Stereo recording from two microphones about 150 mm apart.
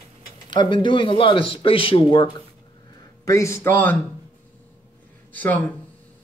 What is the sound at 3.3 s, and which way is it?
Speech, 20° left (ahead or behind).